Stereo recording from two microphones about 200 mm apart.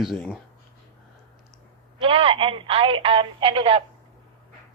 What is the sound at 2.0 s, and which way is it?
Speech, 25° right (ahead or behind).